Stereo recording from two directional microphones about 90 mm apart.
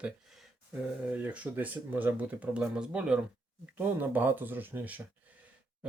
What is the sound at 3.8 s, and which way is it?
Speech, 20° right (ahead or behind).